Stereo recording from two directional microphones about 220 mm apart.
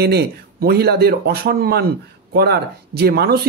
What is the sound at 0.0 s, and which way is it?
Speech, 45° right (ahead or behind).